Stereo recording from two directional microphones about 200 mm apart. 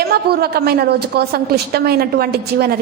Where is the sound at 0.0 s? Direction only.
50° right (ahead or behind).